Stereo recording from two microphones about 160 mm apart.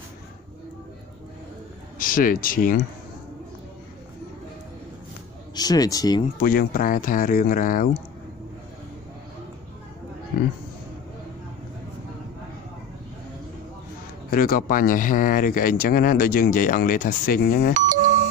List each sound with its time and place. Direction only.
2.0 s speech: 60° left (ahead or behind)
5.5 s speech: 25° left (ahead or behind)
6.4 s speech: 65° left (ahead or behind)
14.3 s speech: 60° left (ahead or behind)
17.7 s doorbell: 55° right (ahead or behind)